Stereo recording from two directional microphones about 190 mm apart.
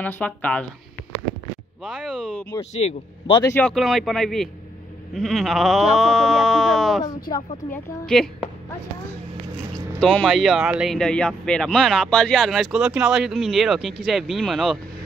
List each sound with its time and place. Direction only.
0.0 s speech: 10° left (ahead or behind)
1.9 s speech: 5° left (ahead or behind)
2.7 s speech: 35° left (ahead or behind)
3.4 s speech: 10° left (ahead or behind)
7.2 s speech: 50° left (ahead or behind)
7.7 s speech: 5° left (ahead or behind)
9.9 s speech: 5° left (ahead or behind)